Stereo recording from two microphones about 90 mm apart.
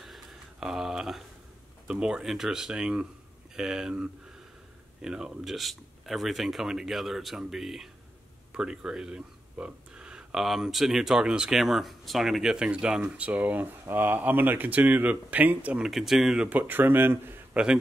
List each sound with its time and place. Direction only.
0.0 s a sound: 5° right (ahead or behind)
1.9 s speech: 10° right (ahead or behind)
15.9 s speech: 5° right (ahead or behind)
16.4 s speech: 20° right (ahead or behind)